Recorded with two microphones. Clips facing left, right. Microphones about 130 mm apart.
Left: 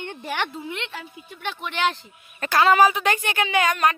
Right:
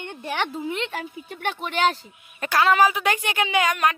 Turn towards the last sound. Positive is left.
turn(degrees=-5)  # may be behind; listen again after turning